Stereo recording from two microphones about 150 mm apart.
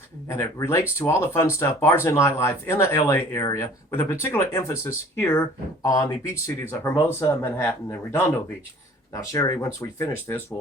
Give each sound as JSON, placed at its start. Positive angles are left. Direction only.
{"t": 0.3, "sound": "speech", "side_deg": 20}